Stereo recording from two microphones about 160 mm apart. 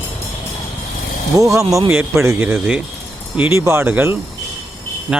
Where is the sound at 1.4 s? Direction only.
20° right (ahead or behind).